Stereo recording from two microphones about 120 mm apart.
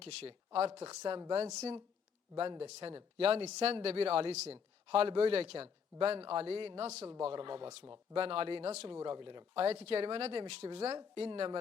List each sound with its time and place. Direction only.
0.0 s speech: 55° right (ahead or behind)
9.0 s speech: 45° right (ahead or behind)
9.6 s speech: 60° right (ahead or behind)
10.9 s speech: 45° right (ahead or behind)